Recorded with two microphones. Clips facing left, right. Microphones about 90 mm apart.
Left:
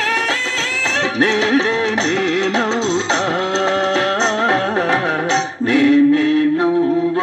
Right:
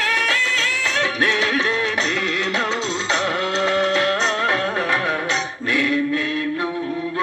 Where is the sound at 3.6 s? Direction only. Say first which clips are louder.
Left 1 dB; 25° left (ahead or behind).